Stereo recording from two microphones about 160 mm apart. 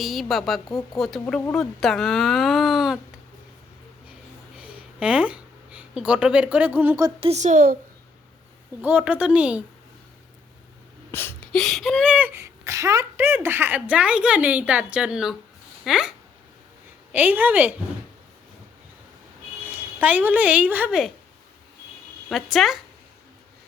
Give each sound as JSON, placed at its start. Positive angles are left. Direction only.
{"t": 0.0, "sound": "speech", "side_deg": 0}
{"t": 4.5, "sound": "a sound", "side_deg": -5}
{"t": 7.0, "sound": "speech", "side_deg": -35}
{"t": 7.3, "sound": "a woman's voice", "side_deg": -50}
{"t": 8.8, "sound": "speech", "side_deg": -10}
{"t": 11.1, "sound": "a sound", "side_deg": 15}
{"t": 11.5, "sound": "speech", "side_deg": 0}
{"t": 12.1, "sound": "speech", "side_deg": -15}
{"t": 19.6, "sound": "speech", "side_deg": -10}
{"t": 22.3, "sound": "speech", "side_deg": 0}